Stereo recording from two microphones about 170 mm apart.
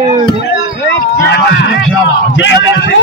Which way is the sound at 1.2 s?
90° left.